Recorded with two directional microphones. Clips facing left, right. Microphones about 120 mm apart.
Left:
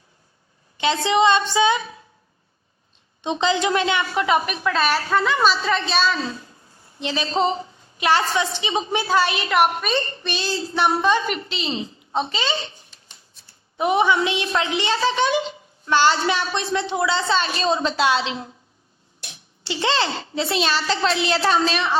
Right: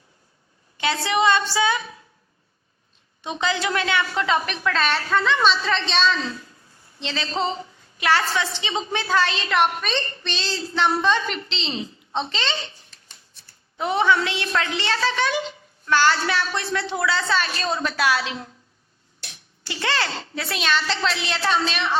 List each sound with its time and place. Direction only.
0.8 s a woman's voice: 20° left (ahead or behind)
3.2 s a woman's voice: 20° left (ahead or behind)
4.9 s a woman's voice: 20° left (ahead or behind)
10.2 s a woman's voice: 15° left (ahead or behind)
12.1 s a woman's voice: 10° left (ahead or behind)
13.7 s a woman's voice: 15° left (ahead or behind); by 21.8 s 35° left (ahead or behind)